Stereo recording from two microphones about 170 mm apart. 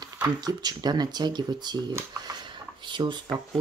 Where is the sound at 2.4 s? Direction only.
25° right (ahead or behind).